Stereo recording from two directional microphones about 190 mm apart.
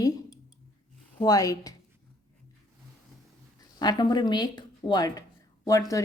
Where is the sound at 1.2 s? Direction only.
20° left (ahead or behind).